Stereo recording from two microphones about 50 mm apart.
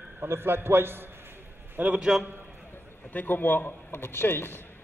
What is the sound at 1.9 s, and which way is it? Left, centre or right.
Speech, centre.